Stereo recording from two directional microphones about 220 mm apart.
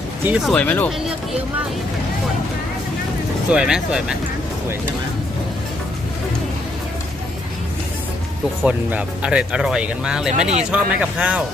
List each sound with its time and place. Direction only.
0.3 s speech: centre (ahead or behind)
3.5 s speech: 5° right (ahead or behind)
8.6 s speech: 5° right (ahead or behind)